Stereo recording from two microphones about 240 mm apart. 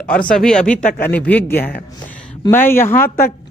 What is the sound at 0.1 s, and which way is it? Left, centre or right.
Speech, left.